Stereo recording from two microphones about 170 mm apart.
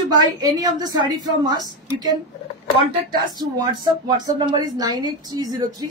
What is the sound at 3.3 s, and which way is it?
A woman's voice, 25° right (ahead or behind).